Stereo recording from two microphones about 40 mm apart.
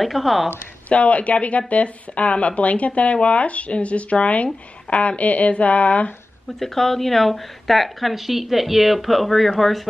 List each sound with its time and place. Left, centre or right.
0.0 s speech: centre
0.5 s speech: left
6.6 s speech: centre